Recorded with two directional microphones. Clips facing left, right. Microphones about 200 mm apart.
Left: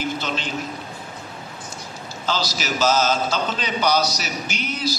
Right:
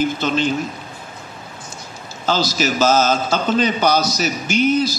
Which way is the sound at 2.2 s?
50° right (ahead or behind).